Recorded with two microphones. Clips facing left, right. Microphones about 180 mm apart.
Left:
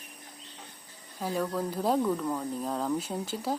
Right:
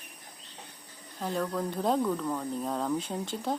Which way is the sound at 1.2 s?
5° left (ahead or behind).